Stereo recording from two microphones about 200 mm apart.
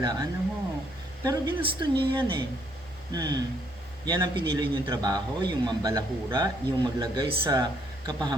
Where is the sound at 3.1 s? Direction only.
20° right (ahead or behind).